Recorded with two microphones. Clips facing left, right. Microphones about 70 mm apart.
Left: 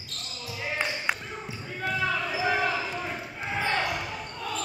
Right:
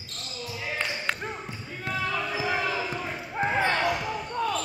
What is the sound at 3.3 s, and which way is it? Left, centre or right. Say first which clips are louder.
Basketball bounce: right 4 dB; right.